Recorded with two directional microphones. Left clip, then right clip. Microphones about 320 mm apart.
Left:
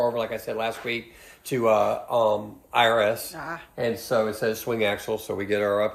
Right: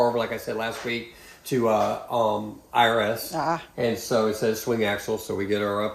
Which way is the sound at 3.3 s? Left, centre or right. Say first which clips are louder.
Right 9 dB; centre.